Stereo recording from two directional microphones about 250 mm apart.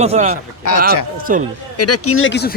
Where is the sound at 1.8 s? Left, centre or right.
Left.